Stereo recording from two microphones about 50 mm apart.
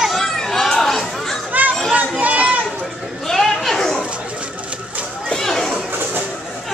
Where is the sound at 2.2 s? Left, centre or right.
Right.